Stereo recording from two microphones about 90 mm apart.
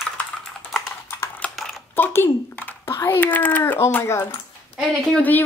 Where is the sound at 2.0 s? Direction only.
25° left (ahead or behind).